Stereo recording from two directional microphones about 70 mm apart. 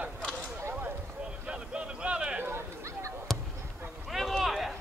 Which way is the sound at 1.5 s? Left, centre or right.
Centre.